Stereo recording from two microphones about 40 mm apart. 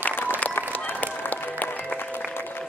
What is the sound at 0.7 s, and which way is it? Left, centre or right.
Music, left.